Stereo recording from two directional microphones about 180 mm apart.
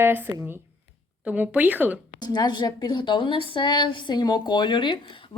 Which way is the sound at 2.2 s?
25° left (ahead or behind).